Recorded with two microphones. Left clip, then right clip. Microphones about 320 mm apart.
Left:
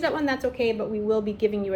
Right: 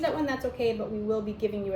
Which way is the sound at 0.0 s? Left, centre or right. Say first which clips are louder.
Left 4 dB; left.